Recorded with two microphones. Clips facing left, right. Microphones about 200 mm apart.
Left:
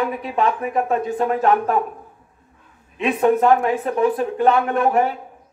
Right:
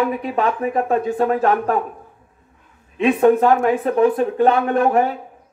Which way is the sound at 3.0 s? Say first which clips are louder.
Right 2 dB; 40° right (ahead or behind).